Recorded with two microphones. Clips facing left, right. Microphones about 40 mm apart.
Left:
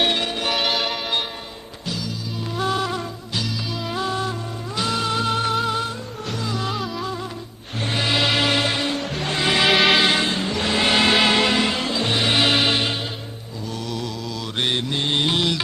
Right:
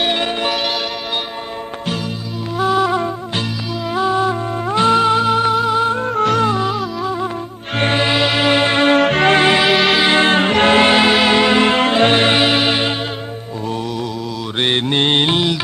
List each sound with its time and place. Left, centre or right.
0.5 s music: centre
2.6 s music: centre
4.7 s music: right; by 5.8 s centre
6.1 s music: right
6.7 s music: centre
8.1 s music: centre
8.6 s music: right
9.0 s music: right
9.6 s music: centre
10.2 s music: right
10.9 s music: centre
11.5 s music: right
12.4 s music: centre
14.6 s mantra: right